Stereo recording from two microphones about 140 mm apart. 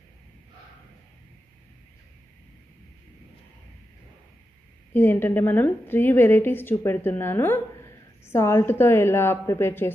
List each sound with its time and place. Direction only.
4.9 s a woman's voice: 15° left (ahead or behind)